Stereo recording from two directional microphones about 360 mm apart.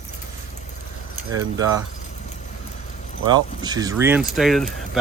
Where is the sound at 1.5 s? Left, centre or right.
Centre.